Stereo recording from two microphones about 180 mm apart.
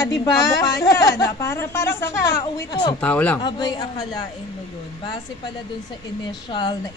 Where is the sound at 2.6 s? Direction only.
25° left (ahead or behind).